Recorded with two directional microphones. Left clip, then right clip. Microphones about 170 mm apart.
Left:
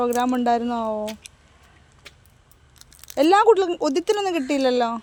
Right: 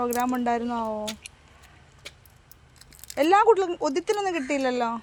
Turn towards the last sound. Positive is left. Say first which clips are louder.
# left 5 dB
turn(degrees=55)  # may be behind; listen again after turning